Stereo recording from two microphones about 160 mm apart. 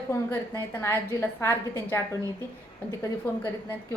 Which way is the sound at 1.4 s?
15° left (ahead or behind).